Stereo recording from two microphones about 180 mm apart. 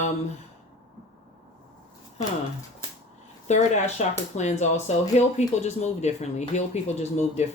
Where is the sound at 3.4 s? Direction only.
40° left (ahead or behind).